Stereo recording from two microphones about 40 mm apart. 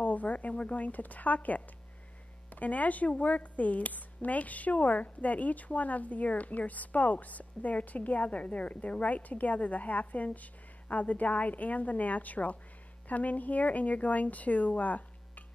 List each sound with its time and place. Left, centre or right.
0.0 s a woman's voice: left